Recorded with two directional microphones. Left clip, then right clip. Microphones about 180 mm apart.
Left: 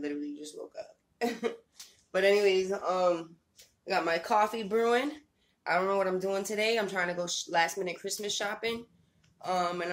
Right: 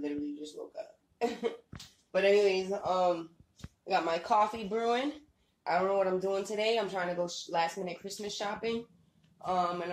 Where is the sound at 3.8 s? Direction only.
25° left (ahead or behind).